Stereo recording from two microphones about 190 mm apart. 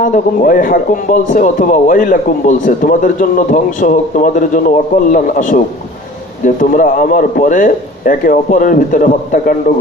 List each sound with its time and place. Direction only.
0.0 s speech: 45° left (ahead or behind)